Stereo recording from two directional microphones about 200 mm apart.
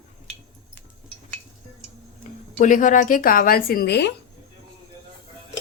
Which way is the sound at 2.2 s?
40° left (ahead or behind).